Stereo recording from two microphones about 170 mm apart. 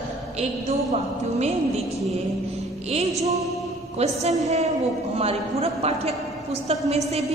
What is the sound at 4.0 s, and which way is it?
A woman's voice, 40° right (ahead or behind).